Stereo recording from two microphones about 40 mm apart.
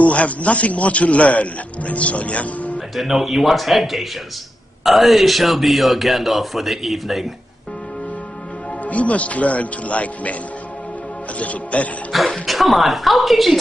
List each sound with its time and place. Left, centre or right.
0.0 s speech: left
3.0 s speech: centre
8.8 s speech: left
11.3 s speech: left
12.1 s speech: centre